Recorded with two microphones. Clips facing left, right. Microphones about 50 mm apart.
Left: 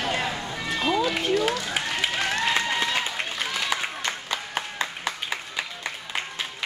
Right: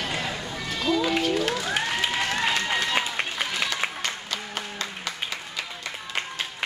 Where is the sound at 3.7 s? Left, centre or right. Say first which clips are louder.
Left 1 dB; centre.